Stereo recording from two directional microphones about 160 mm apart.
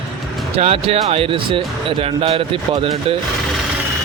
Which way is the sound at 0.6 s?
40° right (ahead or behind).